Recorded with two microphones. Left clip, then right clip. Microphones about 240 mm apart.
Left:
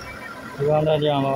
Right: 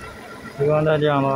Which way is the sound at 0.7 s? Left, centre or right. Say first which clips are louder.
Right 1 dB; centre.